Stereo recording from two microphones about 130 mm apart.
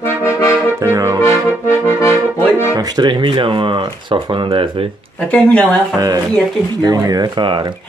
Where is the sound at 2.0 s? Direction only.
20° left (ahead or behind).